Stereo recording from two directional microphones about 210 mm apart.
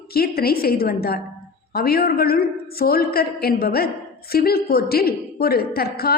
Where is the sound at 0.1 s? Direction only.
45° left (ahead or behind).